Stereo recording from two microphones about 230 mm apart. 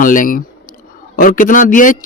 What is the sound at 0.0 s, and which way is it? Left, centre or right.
Speech, left.